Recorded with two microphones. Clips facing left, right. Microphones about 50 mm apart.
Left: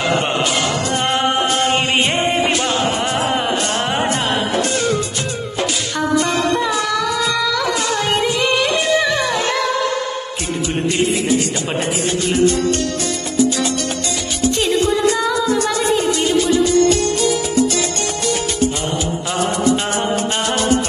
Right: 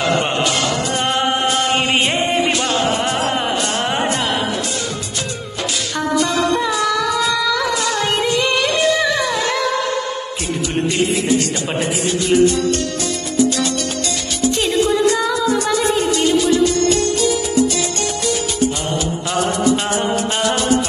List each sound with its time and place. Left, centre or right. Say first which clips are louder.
0.0 s music: even; centre
2.6 s music: even; centre
4.6 s music: left 6 dB; left
7.0 s a sound: right 1 dB; centre
8.0 s music: even; centre
9.1 s music: even; left
14.6 s music: right 1 dB; centre